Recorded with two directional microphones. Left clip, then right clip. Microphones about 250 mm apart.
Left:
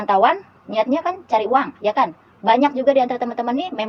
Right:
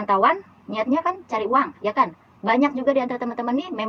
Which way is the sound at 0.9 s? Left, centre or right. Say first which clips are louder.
Left 4 dB; centre.